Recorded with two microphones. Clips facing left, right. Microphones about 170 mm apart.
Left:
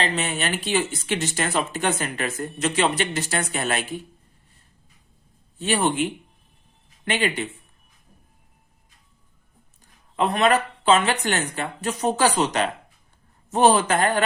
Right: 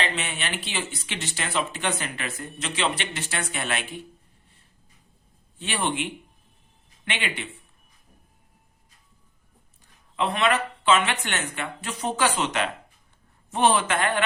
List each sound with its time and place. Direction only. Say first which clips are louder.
0.0 s speech: left 4 dB; 40° left (ahead or behind)
5.5 s speech: left 6 dB; 40° left (ahead or behind)
10.2 s speech: left 4 dB; 40° left (ahead or behind)